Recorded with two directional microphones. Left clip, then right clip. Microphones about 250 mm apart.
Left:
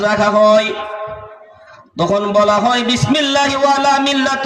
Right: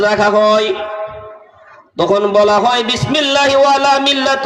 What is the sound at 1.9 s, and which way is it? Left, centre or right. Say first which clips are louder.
A man's voice: right 2 dB; right.